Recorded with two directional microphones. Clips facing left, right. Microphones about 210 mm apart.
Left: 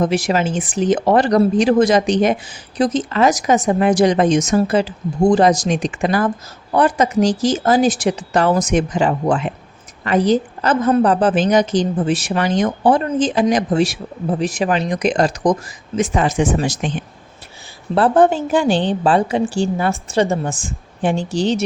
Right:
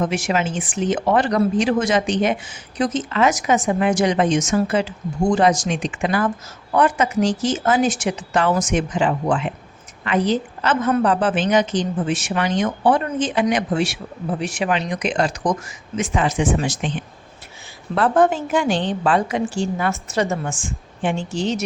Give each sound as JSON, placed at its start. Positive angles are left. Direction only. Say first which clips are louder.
{"t": 0.0, "sound": "speech", "louder": "left 4 dB", "side_deg": 35}
{"t": 17.9, "sound": "speech", "louder": "left 3 dB", "side_deg": 30}